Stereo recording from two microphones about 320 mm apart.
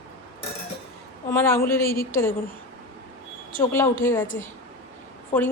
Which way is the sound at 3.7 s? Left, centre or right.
Centre.